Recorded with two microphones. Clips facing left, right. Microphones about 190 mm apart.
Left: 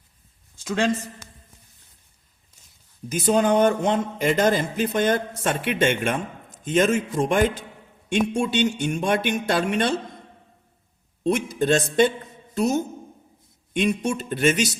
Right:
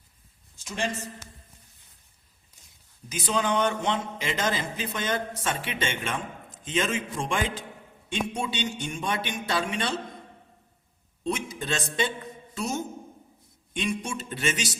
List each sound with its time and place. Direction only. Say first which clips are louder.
0.6 s a man's voice: left 8 dB; 90° left
3.1 s a man's voice: left 8 dB; 50° left (ahead or behind)
8.4 s speech: left 9 dB; 60° left (ahead or behind)
9.0 s a man's voice: left 7 dB; 45° left (ahead or behind)
9.6 s speech: left 8 dB; 65° left (ahead or behind)
11.3 s speech: left 8 dB; 60° left (ahead or behind)
11.7 s a man's voice: left 10 dB; 50° left (ahead or behind)
12.5 s a sound: left 9 dB; 40° left (ahead or behind)
13.7 s speech: left 7 dB; 60° left (ahead or behind)